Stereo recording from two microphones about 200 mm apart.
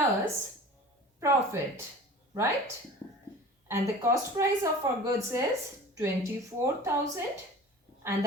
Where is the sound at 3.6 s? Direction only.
15° right (ahead or behind).